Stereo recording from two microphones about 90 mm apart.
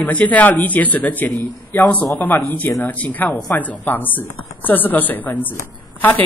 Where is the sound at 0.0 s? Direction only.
15° left (ahead or behind).